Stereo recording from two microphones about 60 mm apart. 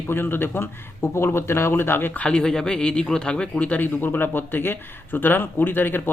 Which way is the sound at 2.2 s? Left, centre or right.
Centre.